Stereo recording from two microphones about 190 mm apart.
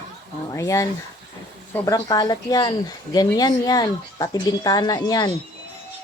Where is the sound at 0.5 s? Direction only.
15° left (ahead or behind).